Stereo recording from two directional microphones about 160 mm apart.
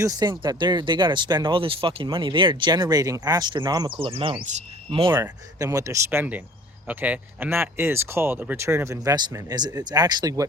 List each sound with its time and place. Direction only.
0.0 s speech: 25° right (ahead or behind)
5.2 s speech: 20° right (ahead or behind)